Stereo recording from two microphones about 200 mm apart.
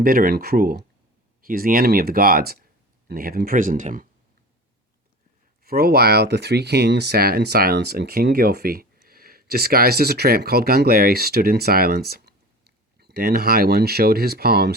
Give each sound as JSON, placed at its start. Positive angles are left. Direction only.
{"t": 0.0, "sound": "speech", "side_deg": -45}
{"t": 5.6, "sound": "speech", "side_deg": -50}